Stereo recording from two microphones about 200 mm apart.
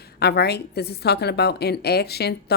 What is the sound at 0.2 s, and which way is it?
A woman's voice, 55° left (ahead or behind).